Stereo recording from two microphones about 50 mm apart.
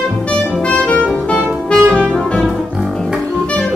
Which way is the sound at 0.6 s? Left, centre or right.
Left.